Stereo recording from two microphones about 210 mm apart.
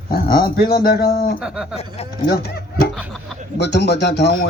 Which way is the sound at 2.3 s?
45° left (ahead or behind).